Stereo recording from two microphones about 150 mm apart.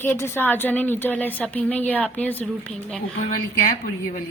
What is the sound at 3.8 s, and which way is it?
Speech, 70° left (ahead or behind).